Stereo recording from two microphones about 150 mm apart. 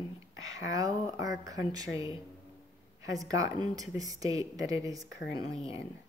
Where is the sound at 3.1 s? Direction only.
25° right (ahead or behind).